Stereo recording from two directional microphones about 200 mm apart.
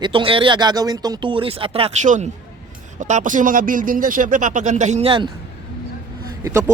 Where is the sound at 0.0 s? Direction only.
25° right (ahead or behind).